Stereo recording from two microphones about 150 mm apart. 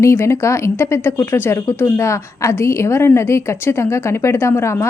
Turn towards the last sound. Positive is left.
turn(degrees=20)  # may be behind; listen again after turning